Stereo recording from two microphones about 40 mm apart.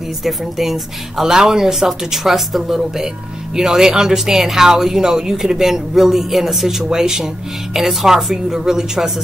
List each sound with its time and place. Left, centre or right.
0.2 s speech: centre